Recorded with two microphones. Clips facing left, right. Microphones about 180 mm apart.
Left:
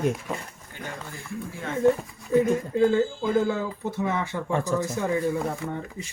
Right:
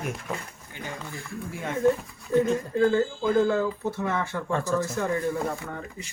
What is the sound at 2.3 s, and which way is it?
Speech, 15° left (ahead or behind).